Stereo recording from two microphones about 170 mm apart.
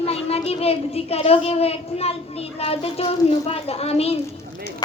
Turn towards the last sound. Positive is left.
turn(degrees=35)  # may be behind; listen again after turning